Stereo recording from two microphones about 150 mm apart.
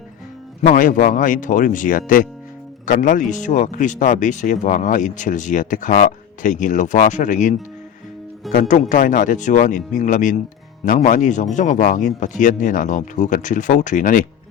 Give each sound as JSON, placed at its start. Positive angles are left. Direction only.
{"t": 0.6, "sound": "speech", "side_deg": 65}
{"t": 8.5, "sound": "speech", "side_deg": 55}